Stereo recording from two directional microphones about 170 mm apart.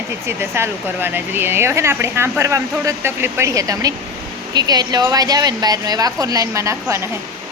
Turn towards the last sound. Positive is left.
turn(degrees=-15)  # may be behind; listen again after turning